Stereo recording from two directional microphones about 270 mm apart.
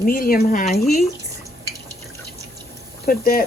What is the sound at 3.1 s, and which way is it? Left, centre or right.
Speech, left.